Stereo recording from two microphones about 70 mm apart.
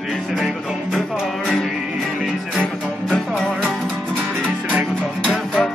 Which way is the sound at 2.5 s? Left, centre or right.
Centre.